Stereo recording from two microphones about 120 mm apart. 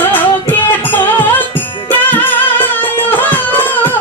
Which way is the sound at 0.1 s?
15° left (ahead or behind).